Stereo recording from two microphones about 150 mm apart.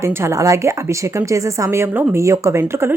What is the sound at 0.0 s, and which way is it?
A woman's voice, 15° right (ahead or behind).